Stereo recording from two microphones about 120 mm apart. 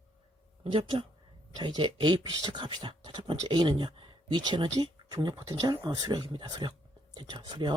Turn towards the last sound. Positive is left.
turn(degrees=-40)  # may be behind; listen again after turning